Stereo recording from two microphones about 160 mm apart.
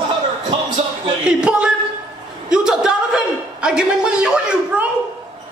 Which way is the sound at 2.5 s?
5° right (ahead or behind).